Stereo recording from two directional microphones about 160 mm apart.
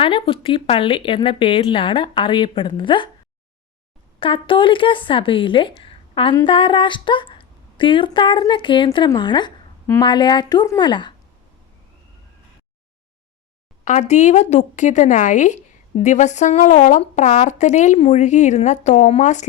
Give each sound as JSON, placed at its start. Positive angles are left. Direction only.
{"t": 0.0, "sound": "speech", "side_deg": 35}
{"t": 4.2, "sound": "speech", "side_deg": 35}
{"t": 13.8, "sound": "speech", "side_deg": 45}